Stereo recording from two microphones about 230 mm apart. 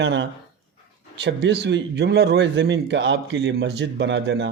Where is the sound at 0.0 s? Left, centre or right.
Right.